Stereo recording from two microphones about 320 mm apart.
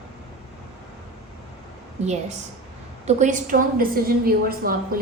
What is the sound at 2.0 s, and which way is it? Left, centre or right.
A woman's voice, right.